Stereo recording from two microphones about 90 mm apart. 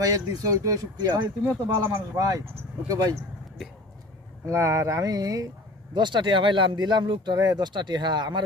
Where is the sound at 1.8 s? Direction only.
30° right (ahead or behind).